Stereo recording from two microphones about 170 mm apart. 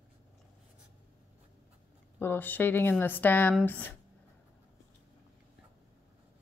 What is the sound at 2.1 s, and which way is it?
Speech, 10° left (ahead or behind).